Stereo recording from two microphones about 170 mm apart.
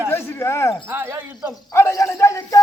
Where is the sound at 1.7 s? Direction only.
15° left (ahead or behind).